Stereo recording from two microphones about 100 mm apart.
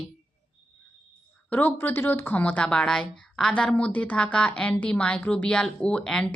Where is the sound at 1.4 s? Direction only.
20° left (ahead or behind).